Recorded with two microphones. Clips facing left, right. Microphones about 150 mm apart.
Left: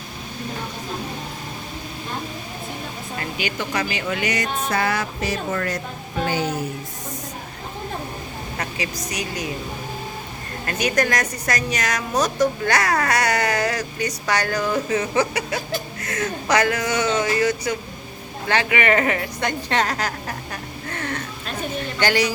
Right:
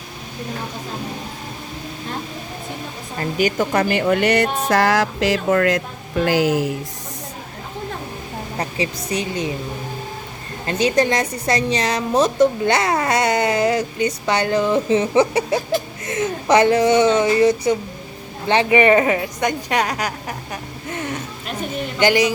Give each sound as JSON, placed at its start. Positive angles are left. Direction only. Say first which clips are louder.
{"t": 3.2, "sound": "speech", "louder": "right 9 dB", "side_deg": -45}
{"t": 4.7, "sound": "speech", "louder": "right 7 dB", "side_deg": -90}
{"t": 6.2, "sound": "speech", "louder": "right 7 dB", "side_deg": -90}
{"t": 8.5, "sound": "a woman's voice", "louder": "right 5 dB", "side_deg": -30}
{"t": 10.7, "sound": "a woman's voice", "louder": "right 4 dB", "side_deg": -25}